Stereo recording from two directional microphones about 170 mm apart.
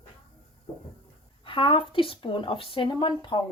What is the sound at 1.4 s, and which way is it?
Speech, 30° left (ahead or behind).